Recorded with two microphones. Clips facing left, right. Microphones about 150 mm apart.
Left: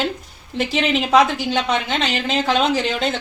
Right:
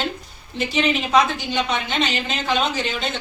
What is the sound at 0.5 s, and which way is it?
A woman's voice, 90° left.